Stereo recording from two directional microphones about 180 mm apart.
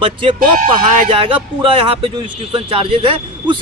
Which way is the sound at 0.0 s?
30° right (ahead or behind).